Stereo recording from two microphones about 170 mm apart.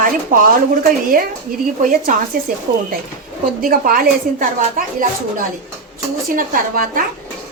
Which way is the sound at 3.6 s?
55° right (ahead or behind).